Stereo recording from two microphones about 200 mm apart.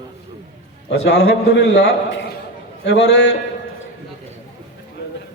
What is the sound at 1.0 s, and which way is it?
A man's voice, 55° left (ahead or behind).